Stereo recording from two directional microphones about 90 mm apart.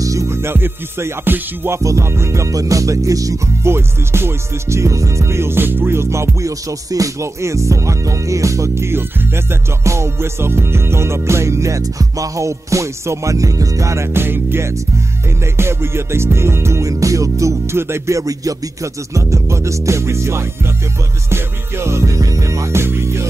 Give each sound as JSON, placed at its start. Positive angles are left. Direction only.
{"t": 0.0, "sound": "music", "side_deg": -35}
{"t": 3.7, "sound": "music", "side_deg": -25}